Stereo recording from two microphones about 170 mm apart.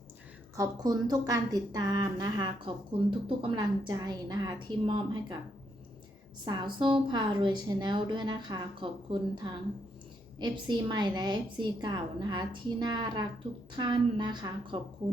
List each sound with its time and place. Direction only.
0.5 s speech: 20° right (ahead or behind)
6.4 s speech: 25° right (ahead or behind)